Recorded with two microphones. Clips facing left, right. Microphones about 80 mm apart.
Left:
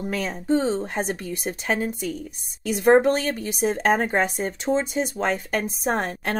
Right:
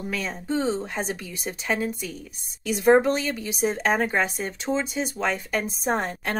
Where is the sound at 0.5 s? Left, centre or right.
Left.